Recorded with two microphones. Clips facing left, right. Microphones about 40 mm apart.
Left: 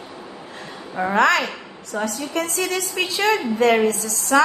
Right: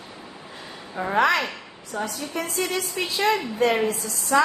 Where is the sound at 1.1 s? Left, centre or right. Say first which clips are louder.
Left 3 dB; left.